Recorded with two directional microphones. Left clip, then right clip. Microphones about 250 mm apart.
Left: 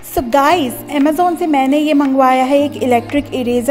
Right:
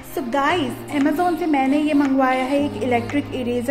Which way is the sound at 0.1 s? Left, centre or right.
Left.